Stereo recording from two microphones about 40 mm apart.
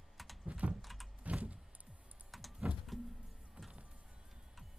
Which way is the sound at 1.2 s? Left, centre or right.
Right.